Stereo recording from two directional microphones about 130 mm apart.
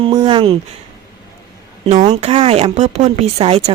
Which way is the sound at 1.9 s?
65° right (ahead or behind).